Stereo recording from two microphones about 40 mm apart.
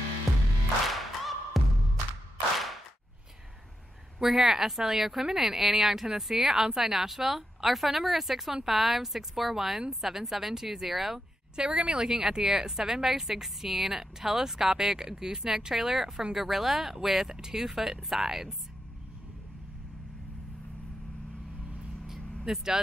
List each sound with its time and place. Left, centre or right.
0.3 s music: centre
4.2 s a woman's voice: centre
11.5 s a woman's voice: right
22.4 s speech: centre